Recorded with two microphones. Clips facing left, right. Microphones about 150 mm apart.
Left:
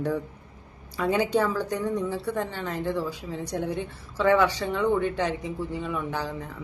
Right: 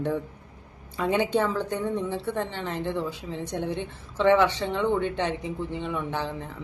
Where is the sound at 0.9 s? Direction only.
25° right (ahead or behind).